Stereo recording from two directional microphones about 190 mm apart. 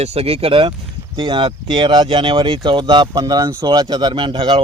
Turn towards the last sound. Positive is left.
turn(degrees=-25)  # may be behind; listen again after turning